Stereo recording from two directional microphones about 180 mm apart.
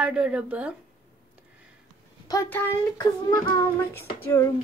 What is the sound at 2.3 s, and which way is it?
A child's voice, 15° left (ahead or behind).